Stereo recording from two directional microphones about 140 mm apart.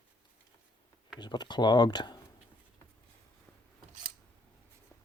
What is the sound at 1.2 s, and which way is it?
Speech, 30° left (ahead or behind).